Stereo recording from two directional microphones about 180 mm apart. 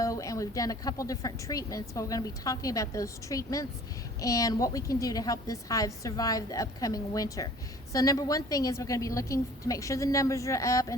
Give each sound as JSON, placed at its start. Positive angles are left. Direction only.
{"t": 0.0, "sound": "a woman's voice", "side_deg": 20}